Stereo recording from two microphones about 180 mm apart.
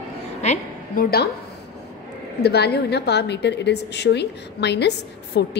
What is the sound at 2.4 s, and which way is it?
A woman's voice, 65° left (ahead or behind).